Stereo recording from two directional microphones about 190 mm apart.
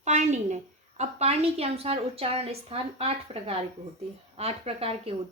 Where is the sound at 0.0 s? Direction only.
35° right (ahead or behind).